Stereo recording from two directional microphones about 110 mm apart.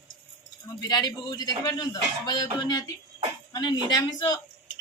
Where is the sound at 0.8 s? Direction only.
40° left (ahead or behind).